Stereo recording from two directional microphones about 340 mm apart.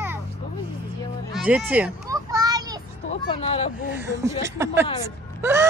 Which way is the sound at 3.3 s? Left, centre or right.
Centre.